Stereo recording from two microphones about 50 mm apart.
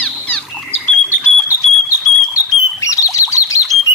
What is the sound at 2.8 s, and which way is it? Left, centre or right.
Rodents, left.